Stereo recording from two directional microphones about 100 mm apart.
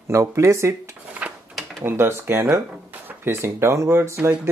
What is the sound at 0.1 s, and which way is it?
Speech, 30° right (ahead or behind).